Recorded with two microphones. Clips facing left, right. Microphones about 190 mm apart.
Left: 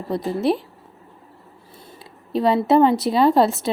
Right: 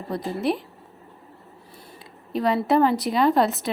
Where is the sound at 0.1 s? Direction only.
25° left (ahead or behind).